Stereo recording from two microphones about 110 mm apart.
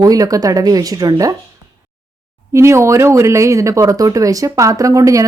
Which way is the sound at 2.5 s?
25° right (ahead or behind).